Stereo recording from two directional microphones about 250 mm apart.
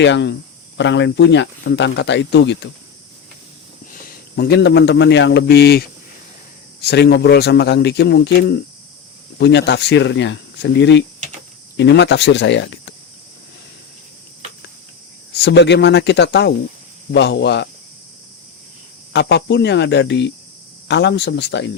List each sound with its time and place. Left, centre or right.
0.0 s speech: left
4.0 s a man's voice: left
15.4 s speech: left
19.1 s speech: left